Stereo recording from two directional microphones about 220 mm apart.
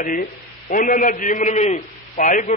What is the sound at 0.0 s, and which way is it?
A man's voice, 35° left (ahead or behind).